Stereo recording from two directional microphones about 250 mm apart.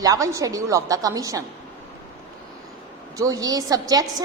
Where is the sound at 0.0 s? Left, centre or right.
Centre.